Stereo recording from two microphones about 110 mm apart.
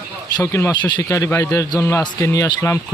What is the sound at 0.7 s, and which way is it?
Speech, 15° left (ahead or behind).